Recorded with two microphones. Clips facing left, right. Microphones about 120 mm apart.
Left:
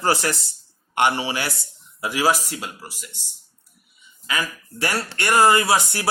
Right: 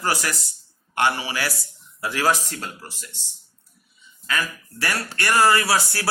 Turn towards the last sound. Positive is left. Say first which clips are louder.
# left 2 dB
turn(degrees=20)  # may be behind; listen again after turning